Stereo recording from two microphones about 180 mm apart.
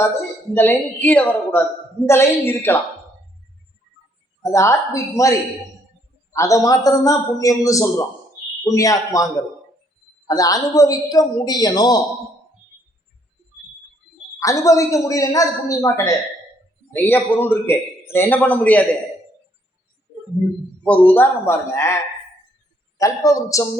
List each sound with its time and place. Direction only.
0.5 s a man's voice: 10° left (ahead or behind)
4.5 s a man's voice: 15° left (ahead or behind)
6.3 s a man's voice: 15° left (ahead or behind)
14.3 s a man's voice: 20° left (ahead or behind)
20.8 s a man's voice: 5° left (ahead or behind)